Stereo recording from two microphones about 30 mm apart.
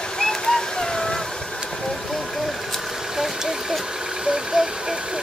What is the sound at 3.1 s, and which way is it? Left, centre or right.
Vehicle, centre.